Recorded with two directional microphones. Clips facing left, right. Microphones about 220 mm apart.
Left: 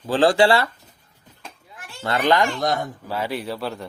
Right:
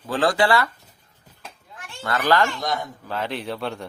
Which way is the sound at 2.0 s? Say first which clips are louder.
Left 1 dB; 25° left (ahead or behind).